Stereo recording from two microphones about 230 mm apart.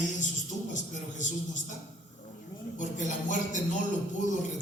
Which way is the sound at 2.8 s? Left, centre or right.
Left.